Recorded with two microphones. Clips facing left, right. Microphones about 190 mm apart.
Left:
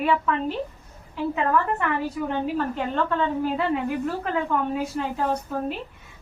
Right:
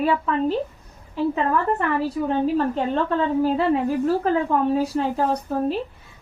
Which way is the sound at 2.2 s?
35° right (ahead or behind).